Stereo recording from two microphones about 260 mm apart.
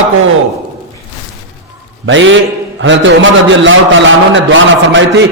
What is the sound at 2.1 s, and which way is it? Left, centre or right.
A man's voice, right.